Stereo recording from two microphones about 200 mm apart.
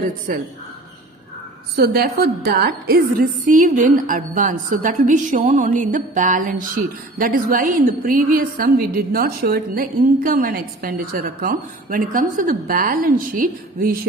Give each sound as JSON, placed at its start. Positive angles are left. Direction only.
{"t": 0.3, "sound": "a woman's voice", "side_deg": -45}
{"t": 1.7, "sound": "a woman's voice", "side_deg": -50}